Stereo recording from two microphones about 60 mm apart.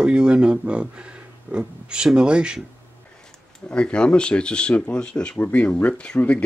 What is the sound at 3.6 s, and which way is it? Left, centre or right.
Speech, centre.